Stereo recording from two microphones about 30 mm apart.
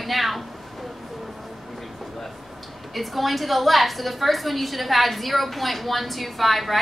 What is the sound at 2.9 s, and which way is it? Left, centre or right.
A woman's voice, centre.